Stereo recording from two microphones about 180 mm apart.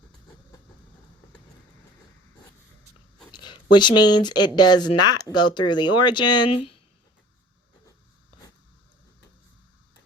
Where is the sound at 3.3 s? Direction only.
25° left (ahead or behind).